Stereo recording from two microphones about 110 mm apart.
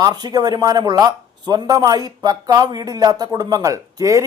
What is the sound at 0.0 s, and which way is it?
Speech, 40° right (ahead or behind).